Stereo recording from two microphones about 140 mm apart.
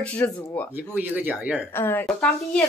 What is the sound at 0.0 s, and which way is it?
Speech, 10° left (ahead or behind).